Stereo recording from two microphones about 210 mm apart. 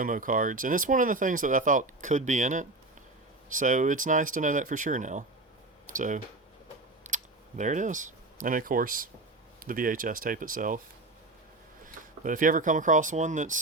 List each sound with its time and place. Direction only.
0.0 s speech: 40° right (ahead or behind)
7.0 s a sound: 35° right (ahead or behind)
9.6 s speech: 40° right (ahead or behind)
12.2 s speech: 40° right (ahead or behind)